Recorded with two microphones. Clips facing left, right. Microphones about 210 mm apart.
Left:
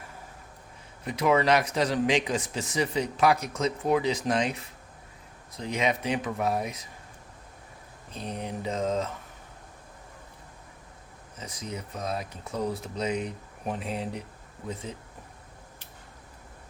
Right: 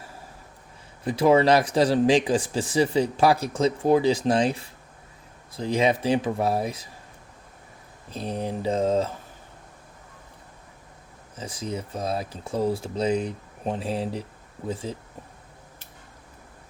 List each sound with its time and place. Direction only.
1.0 s speech: 30° right (ahead or behind)
8.1 s speech: 35° right (ahead or behind)
11.3 s speech: 30° right (ahead or behind)